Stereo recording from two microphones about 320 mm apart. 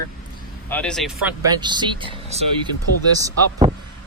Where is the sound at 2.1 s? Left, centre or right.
Centre.